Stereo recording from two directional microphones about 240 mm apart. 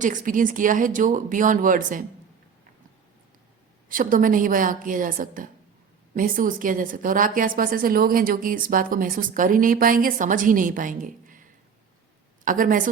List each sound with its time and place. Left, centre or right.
0.0 s a woman's voice: right
3.8 s a woman's voice: right
12.5 s a woman's voice: right